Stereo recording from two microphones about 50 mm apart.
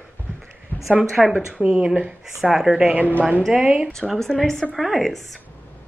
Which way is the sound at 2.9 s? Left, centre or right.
Right.